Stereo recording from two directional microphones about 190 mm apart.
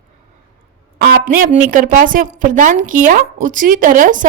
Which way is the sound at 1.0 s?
50° right (ahead or behind).